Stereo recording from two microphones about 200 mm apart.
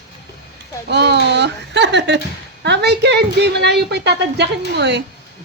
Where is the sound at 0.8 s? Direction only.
60° right (ahead or behind).